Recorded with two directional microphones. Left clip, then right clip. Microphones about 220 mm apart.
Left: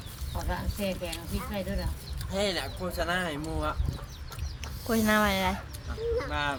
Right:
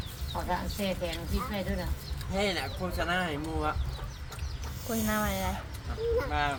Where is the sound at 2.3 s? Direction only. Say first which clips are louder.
Left 1 dB; 50° left (ahead or behind).